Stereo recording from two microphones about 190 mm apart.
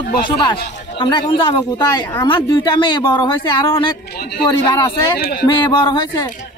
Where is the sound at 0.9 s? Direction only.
25° left (ahead or behind).